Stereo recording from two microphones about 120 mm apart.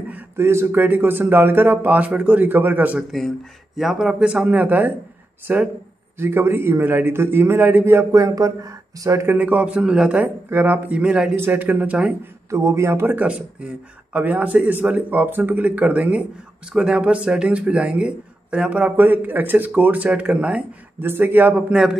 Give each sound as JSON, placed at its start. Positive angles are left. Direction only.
{"t": 0.1, "sound": "speech", "side_deg": -20}
{"t": 3.1, "sound": "a man's voice", "side_deg": 0}
{"t": 10.2, "sound": "speech", "side_deg": -15}
{"t": 11.3, "sound": "speech", "side_deg": -20}
{"t": 12.4, "sound": "a man's voice", "side_deg": -25}